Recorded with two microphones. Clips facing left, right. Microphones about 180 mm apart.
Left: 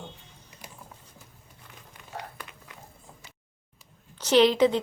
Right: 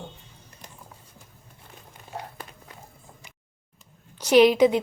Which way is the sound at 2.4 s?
35° right (ahead or behind).